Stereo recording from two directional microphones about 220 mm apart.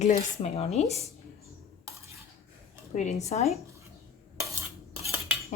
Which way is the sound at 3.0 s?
30° left (ahead or behind).